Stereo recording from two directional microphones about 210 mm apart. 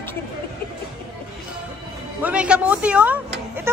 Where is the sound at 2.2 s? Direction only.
5° right (ahead or behind).